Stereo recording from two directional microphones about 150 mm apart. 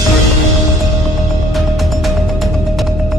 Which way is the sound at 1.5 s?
Centre (ahead or behind).